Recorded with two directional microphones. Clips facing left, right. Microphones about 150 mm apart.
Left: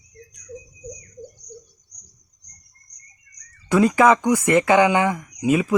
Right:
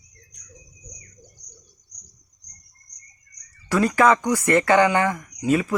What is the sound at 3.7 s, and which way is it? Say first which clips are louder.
Speech: left 2 dB; 20° left (ahead or behind).